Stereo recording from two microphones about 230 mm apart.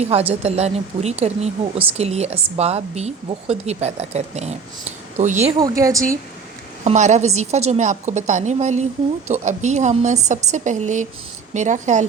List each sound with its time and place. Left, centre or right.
0.0 s a woman's voice: right
5.5 s a woman's voice: centre
6.8 s a woman's voice: right